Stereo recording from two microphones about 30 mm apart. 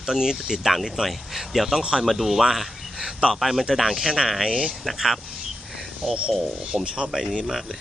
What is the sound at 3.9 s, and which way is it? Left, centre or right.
Speech, centre.